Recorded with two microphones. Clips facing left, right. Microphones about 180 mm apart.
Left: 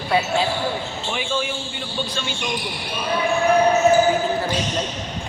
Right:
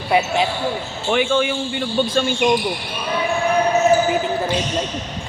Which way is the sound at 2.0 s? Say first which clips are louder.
Right 8 dB; 50° right (ahead or behind).